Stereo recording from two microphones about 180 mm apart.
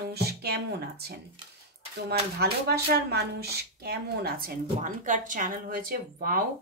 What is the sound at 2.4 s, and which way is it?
Speech, 60° right (ahead or behind).